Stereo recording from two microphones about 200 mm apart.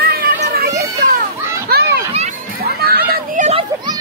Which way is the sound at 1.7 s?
55° right (ahead or behind).